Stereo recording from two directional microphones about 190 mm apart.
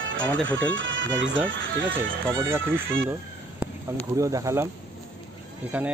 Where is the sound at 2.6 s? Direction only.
80° right.